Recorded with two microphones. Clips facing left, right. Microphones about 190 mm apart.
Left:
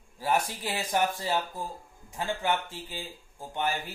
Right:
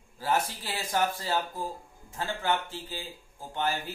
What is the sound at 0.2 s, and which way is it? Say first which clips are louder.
A man's voice: left 1 dB; 20° left (ahead or behind).